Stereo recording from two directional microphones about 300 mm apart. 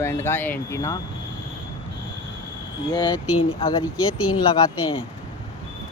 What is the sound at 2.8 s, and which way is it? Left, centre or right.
Speech, centre.